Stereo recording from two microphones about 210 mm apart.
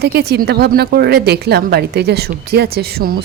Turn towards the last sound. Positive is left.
turn(degrees=-45)  # may be behind; listen again after turning